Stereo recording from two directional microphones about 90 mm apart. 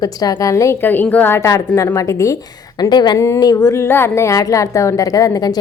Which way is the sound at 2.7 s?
50° left (ahead or behind).